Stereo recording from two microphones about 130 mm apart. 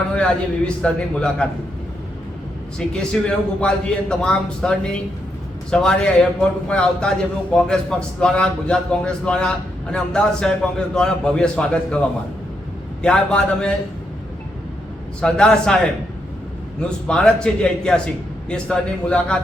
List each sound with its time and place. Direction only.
0.1 s a man's voice: 10° left (ahead or behind)
2.7 s a man's voice: 5° left (ahead or behind)
13.0 s a man's voice: 5° left (ahead or behind)
15.2 s a man's voice: 5° left (ahead or behind)
17.1 s a man's voice: 5° left (ahead or behind)